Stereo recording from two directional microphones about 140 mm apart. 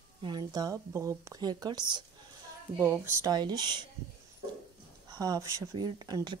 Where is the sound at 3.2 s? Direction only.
30° right (ahead or behind).